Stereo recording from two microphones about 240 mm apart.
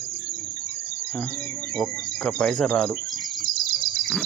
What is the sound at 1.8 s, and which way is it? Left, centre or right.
Speech, centre.